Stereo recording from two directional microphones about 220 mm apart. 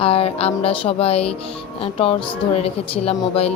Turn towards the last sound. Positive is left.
turn(degrees=25)  # may be behind; listen again after turning